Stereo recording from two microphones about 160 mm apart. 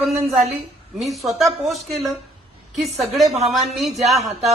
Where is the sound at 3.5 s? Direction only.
Centre (ahead or behind).